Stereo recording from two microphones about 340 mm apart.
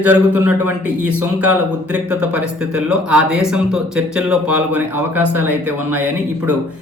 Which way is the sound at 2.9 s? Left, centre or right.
Centre.